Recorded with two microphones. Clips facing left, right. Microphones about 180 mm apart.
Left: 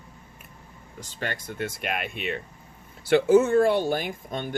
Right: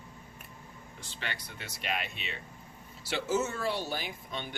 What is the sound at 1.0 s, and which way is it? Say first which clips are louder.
Speech: left 8 dB; 45° left (ahead or behind).